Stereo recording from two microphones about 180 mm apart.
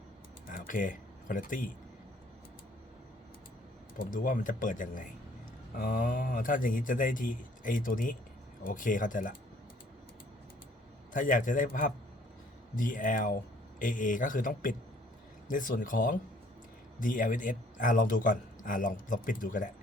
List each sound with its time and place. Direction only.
0.4 s a sound: 50° left (ahead or behind)
3.9 s speech: 50° left (ahead or behind)
11.1 s speech: 45° left (ahead or behind)